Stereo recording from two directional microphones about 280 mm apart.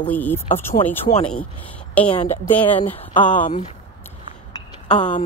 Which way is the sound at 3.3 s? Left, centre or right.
Left.